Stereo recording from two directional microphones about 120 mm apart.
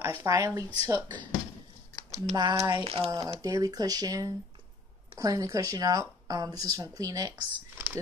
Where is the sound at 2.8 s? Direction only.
55° right (ahead or behind).